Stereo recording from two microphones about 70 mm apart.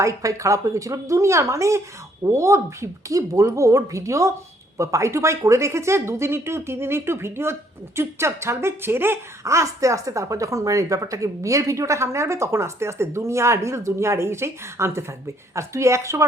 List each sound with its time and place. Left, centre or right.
0.0 s speech: right